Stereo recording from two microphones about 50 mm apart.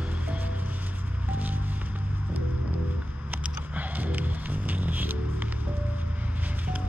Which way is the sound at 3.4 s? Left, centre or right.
Right.